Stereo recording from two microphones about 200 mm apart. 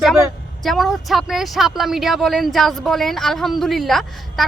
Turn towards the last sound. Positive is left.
turn(degrees=0)  # may be behind; listen again after turning